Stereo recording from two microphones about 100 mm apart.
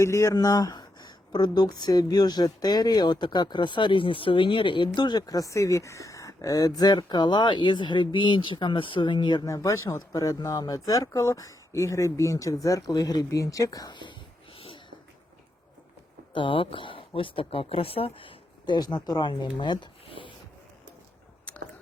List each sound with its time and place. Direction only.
0.0 s speech: 30° left (ahead or behind); by 9.5 s 50° left (ahead or behind)
9.5 s speech: 30° left (ahead or behind); by 14.9 s 60° left (ahead or behind)
16.3 s speech: 55° left (ahead or behind)
19.5 s a sound: 50° left (ahead or behind)